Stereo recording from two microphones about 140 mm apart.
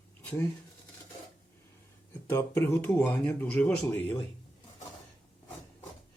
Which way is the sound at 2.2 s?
15° left (ahead or behind).